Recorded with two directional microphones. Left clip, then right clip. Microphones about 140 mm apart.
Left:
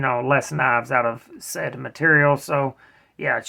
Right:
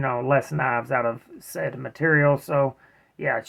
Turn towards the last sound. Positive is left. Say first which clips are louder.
# left 2 dB
turn(degrees=25)  # may be behind; listen again after turning